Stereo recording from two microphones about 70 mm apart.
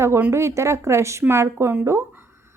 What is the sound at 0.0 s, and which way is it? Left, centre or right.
A woman's voice, right.